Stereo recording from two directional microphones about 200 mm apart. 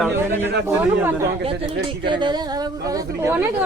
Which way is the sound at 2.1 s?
25° right (ahead or behind).